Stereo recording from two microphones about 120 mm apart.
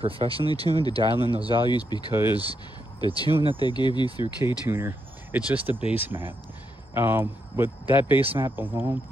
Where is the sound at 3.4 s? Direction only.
35° left (ahead or behind).